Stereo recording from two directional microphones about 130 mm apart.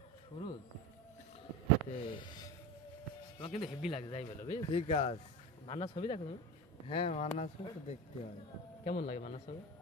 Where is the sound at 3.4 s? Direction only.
50° left (ahead or behind).